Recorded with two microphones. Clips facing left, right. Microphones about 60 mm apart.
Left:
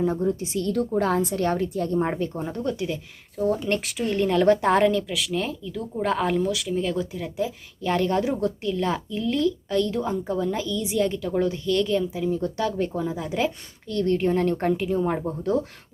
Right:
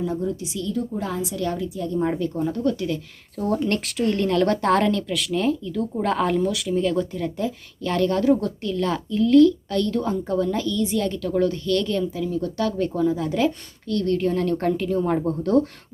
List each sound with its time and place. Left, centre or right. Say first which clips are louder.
0.0 s speech: left 2 dB; left
0.6 s a woman's voice: left 4 dB; left
2.0 s speech: right 6 dB; left
3.3 s speech: right 1 dB; centre
7.9 s a woman's voice: right 3 dB; centre
12.2 s speech: right 1 dB; left
14.7 s a woman's voice: right 1 dB; centre